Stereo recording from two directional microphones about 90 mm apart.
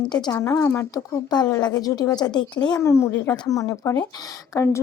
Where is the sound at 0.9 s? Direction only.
45° left (ahead or behind).